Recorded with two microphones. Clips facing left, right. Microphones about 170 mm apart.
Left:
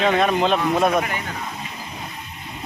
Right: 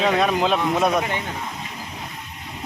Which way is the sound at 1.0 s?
25° right (ahead or behind).